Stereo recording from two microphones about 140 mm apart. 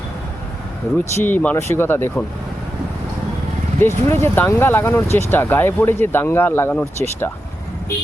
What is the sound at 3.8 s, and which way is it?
Speech, 20° left (ahead or behind).